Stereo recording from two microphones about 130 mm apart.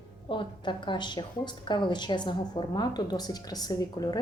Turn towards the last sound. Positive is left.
turn(degrees=30)  # may be behind; listen again after turning